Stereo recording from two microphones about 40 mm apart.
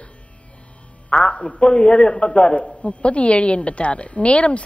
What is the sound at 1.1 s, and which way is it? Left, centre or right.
A man's voice, left.